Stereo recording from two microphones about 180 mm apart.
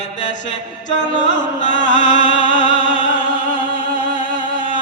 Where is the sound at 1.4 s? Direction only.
45° left (ahead or behind).